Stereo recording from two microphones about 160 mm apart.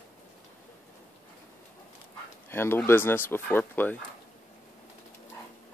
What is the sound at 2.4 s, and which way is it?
Speech, 15° left (ahead or behind).